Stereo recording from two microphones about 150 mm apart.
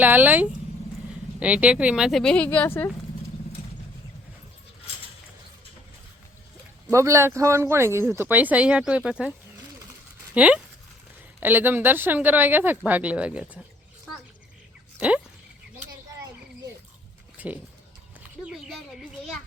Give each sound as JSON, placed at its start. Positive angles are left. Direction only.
{"t": 0.0, "sound": "speech", "side_deg": -10}
{"t": 6.9, "sound": "speech", "side_deg": -20}
{"t": 10.3, "sound": "speech", "side_deg": -10}
{"t": 14.9, "sound": "speech", "side_deg": -10}
{"t": 17.3, "sound": "a sound", "side_deg": -10}